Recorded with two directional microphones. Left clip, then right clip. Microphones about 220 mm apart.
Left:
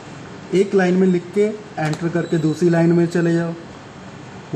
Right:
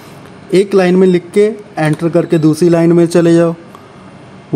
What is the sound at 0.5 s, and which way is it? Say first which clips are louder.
A man's voice: right 7 dB; 50° right (ahead or behind).